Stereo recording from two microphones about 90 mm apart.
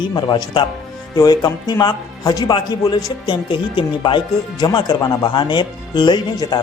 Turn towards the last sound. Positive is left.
turn(degrees=50)  # may be behind; listen again after turning